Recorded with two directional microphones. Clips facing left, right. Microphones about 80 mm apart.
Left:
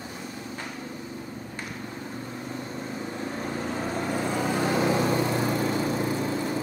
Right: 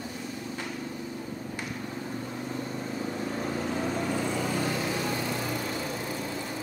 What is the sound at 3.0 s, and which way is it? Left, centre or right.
Vehicle, centre.